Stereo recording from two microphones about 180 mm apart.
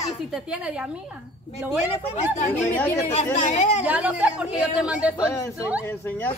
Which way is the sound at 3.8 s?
5° right (ahead or behind).